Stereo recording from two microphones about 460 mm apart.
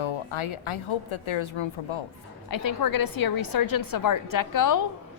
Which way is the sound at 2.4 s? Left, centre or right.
Left.